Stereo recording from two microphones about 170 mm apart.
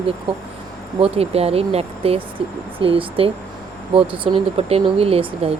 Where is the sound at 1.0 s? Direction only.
35° right (ahead or behind).